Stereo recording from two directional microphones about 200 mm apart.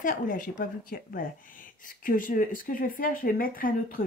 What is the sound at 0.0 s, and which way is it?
Speech, 40° left (ahead or behind).